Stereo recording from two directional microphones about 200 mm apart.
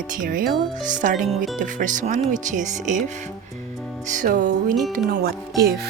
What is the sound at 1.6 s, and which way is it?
Speech, 40° right (ahead or behind).